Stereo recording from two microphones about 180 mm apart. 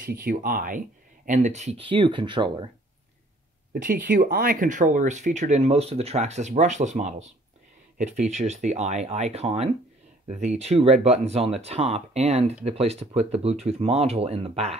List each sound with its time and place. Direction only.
0.0 s speech: 55° right (ahead or behind); by 2.7 s 25° right (ahead or behind)
3.8 s speech: 60° right (ahead or behind); by 14.8 s 35° right (ahead or behind)